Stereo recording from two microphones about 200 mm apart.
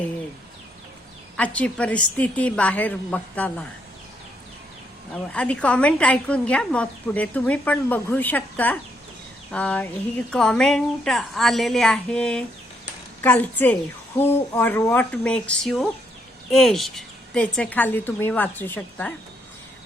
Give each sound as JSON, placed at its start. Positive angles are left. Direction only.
{"t": 1.4, "sound": "a woman's voice", "side_deg": 5}
{"t": 5.3, "sound": "a woman's voice", "side_deg": 5}